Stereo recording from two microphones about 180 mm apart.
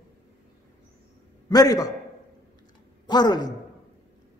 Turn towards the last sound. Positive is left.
turn(degrees=25)  # may be behind; listen again after turning